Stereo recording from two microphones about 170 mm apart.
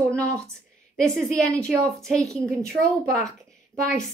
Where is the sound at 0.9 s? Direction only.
Centre (ahead or behind).